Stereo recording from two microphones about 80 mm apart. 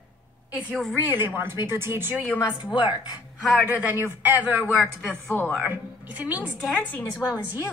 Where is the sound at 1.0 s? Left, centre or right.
Right.